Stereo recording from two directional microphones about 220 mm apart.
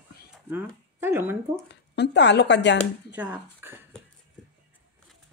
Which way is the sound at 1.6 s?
50° left (ahead or behind).